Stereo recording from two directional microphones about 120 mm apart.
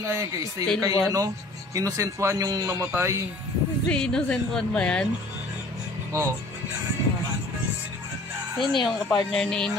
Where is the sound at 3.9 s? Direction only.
10° left (ahead or behind).